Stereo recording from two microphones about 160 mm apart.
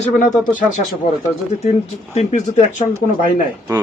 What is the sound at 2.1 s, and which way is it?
Speech, 40° left (ahead or behind).